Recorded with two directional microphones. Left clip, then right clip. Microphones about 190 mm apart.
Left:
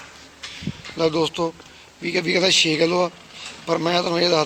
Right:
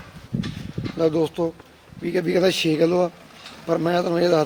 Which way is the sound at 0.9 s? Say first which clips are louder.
Even; 40° right (ahead or behind).